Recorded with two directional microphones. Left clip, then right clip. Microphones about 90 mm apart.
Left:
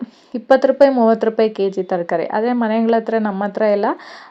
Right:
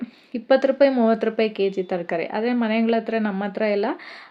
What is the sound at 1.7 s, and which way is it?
A woman's voice, 25° left (ahead or behind).